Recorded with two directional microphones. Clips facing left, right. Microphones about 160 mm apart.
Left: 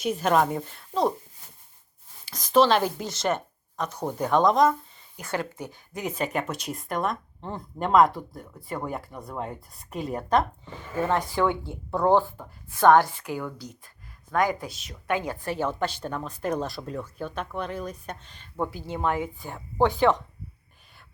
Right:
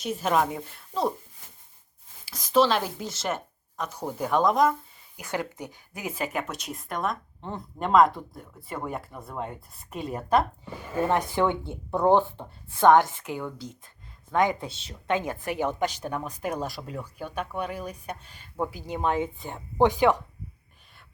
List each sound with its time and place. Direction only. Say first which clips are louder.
0.0 s a woman's voice: left 2 dB; centre (ahead or behind)
2.2 s speech: left 2 dB; 5° right (ahead or behind)